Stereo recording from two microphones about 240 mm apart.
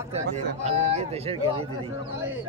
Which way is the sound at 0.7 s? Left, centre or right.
Right.